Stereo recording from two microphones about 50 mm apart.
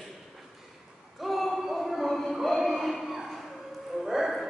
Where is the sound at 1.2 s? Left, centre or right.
Centre.